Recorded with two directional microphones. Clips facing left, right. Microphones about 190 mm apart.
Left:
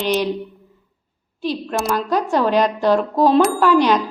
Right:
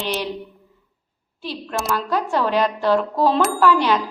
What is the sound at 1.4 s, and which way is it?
A woman's voice, 15° left (ahead or behind).